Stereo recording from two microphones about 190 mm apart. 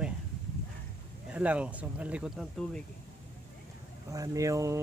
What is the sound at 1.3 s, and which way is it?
Speech, 5° right (ahead or behind).